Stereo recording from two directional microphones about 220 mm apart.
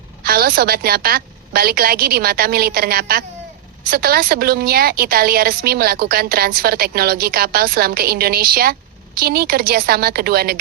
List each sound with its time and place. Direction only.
0.3 s a woman's voice: 45° right (ahead or behind)